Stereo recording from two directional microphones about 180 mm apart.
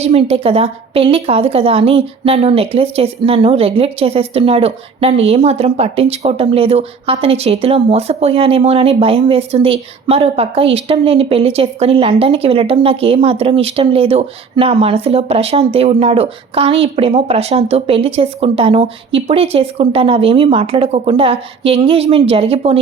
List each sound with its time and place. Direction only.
0.0 s a woman's voice: 30° right (ahead or behind)